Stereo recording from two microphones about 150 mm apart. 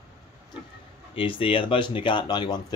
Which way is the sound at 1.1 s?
35° left (ahead or behind).